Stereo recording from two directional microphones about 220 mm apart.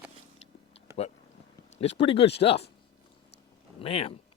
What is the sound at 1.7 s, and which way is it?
Speech, 25° left (ahead or behind).